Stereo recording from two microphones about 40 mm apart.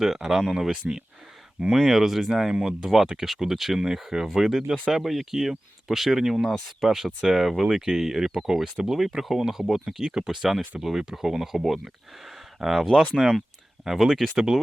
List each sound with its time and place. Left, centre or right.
0.0 s speech: centre
8.5 s speech: centre
13.2 s speech: centre